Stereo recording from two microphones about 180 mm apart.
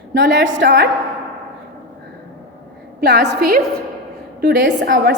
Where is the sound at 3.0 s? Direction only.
70° right (ahead or behind).